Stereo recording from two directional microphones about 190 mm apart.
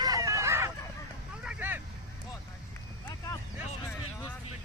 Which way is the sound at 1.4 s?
10° right (ahead or behind).